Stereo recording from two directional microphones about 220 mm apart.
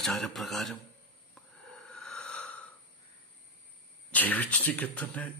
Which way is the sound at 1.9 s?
Centre (ahead or behind).